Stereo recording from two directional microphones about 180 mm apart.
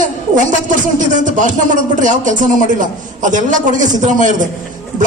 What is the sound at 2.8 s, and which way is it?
A man's voice, 45° right (ahead or behind).